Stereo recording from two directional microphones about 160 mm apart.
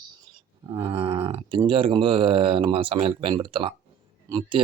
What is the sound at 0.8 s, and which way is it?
Speech, 35° right (ahead or behind).